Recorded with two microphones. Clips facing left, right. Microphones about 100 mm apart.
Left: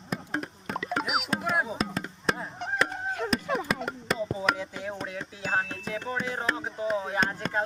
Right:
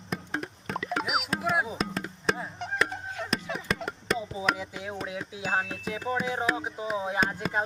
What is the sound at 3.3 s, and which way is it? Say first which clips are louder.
Chop: left 2 dB; centre (ahead or behind).